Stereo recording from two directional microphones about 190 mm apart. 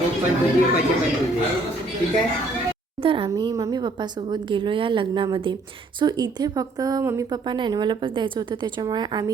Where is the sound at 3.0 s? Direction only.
25° right (ahead or behind).